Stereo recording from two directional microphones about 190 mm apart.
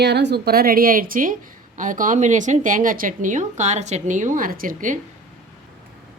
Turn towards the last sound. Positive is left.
turn(degrees=-45)  # may be behind; listen again after turning